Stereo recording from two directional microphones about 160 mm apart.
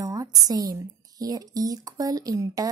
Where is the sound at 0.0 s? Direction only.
20° right (ahead or behind).